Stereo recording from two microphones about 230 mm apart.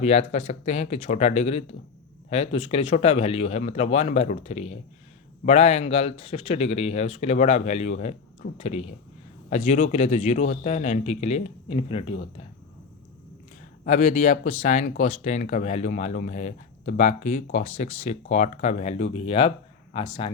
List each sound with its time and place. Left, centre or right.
0.0 s speech: left
13.8 s a man's voice: left